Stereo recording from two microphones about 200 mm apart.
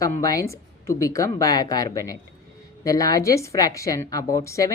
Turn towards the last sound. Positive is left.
turn(degrees=15)  # may be behind; listen again after turning